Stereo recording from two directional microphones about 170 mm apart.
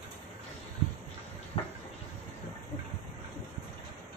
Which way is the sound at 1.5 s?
40° left (ahead or behind).